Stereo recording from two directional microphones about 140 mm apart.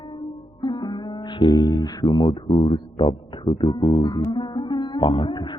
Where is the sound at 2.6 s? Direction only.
40° left (ahead or behind).